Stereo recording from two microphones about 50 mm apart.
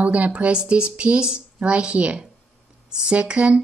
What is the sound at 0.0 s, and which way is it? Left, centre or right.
A woman's voice, right.